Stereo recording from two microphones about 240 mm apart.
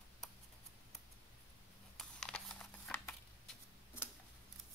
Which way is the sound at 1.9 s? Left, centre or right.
Centre.